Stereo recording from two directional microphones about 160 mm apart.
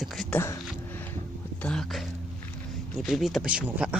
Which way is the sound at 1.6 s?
5° left (ahead or behind).